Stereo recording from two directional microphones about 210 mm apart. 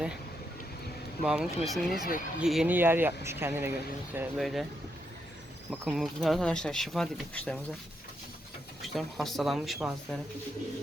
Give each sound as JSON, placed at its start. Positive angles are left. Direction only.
{"t": 1.2, "sound": "speech", "side_deg": -5}
{"t": 1.9, "sound": "speech", "side_deg": 45}
{"t": 2.4, "sound": "speech", "side_deg": -5}
{"t": 5.7, "sound": "speech", "side_deg": 0}
{"t": 8.8, "sound": "speech", "side_deg": 0}